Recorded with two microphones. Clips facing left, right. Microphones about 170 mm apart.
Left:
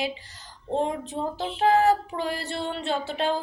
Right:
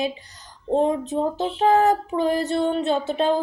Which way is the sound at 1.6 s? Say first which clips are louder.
Right 2 dB; 20° right (ahead or behind).